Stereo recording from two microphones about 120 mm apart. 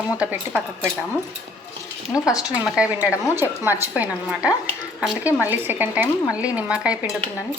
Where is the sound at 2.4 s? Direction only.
5° right (ahead or behind).